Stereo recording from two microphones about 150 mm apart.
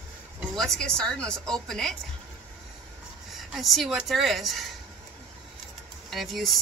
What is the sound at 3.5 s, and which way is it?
Speech, centre (ahead or behind).